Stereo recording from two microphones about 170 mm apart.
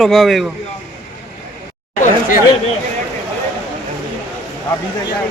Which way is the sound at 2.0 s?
45° left (ahead or behind).